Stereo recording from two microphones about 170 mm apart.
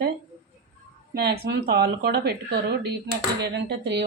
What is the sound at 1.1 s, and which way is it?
A woman's voice, 70° right (ahead or behind).